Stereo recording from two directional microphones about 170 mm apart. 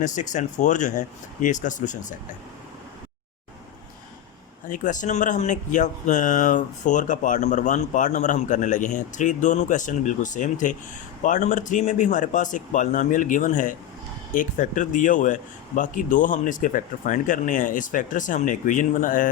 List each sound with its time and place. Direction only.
0.0 s speech: 45° left (ahead or behind)
4.7 s speech: 50° left (ahead or behind)